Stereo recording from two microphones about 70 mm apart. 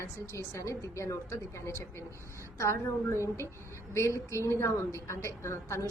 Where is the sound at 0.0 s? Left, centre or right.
Left.